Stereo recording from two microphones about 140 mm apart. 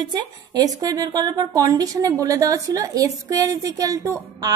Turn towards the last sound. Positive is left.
turn(degrees=-25)  # may be behind; listen again after turning